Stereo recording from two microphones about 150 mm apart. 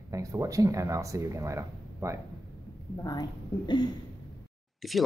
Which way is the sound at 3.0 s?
25° left (ahead or behind).